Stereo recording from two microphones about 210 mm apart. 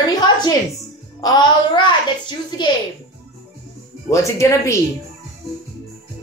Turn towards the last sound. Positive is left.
turn(degrees=15)  # may be behind; listen again after turning